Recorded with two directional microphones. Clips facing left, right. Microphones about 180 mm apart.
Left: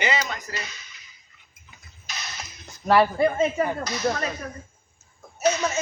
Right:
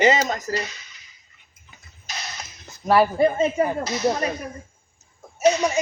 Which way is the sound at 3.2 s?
20° right (ahead or behind).